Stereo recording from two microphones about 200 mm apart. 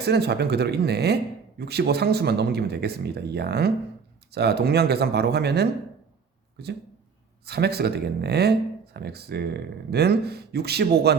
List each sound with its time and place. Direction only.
0.0 s speech: 55° right (ahead or behind)